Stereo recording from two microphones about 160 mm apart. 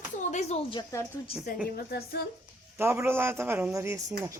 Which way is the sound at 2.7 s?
15° right (ahead or behind).